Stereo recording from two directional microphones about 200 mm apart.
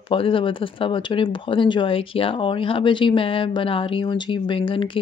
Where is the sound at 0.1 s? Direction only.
25° left (ahead or behind).